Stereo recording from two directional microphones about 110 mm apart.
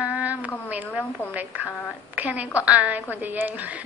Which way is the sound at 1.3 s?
15° right (ahead or behind).